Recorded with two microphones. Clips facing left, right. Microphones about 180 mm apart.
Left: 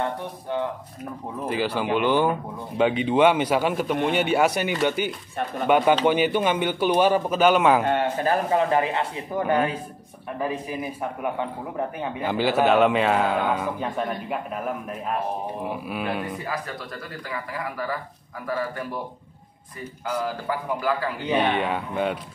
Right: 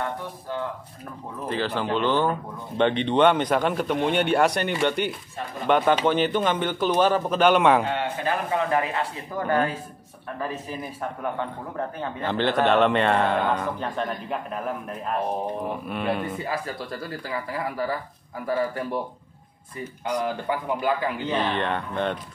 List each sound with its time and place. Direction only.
1.4 s a man's voice: 10° left (ahead or behind)
7.8 s a man's voice: 45° left (ahead or behind); by 16.3 s centre (ahead or behind)
16.3 s speech: 30° right (ahead or behind)
20.1 s speech: 20° right (ahead or behind)
21.5 s a man's voice: 5° left (ahead or behind)